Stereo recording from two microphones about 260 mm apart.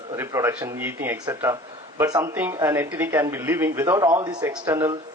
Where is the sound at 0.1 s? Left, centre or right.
Centre.